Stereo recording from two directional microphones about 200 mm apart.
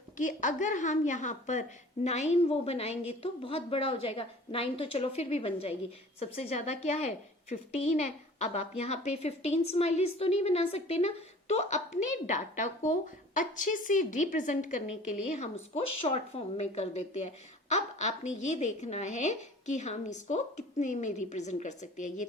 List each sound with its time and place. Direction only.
0.2 s a woman's voice: 40° left (ahead or behind)